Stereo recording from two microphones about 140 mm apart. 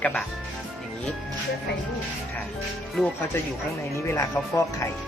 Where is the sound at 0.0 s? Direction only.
10° left (ahead or behind).